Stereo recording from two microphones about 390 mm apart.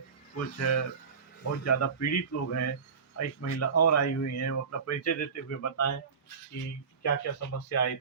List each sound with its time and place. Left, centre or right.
0.3 s speech: left
7.0 s speech: left